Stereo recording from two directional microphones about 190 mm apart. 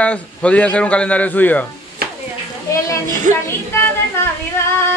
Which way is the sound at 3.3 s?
40° right (ahead or behind).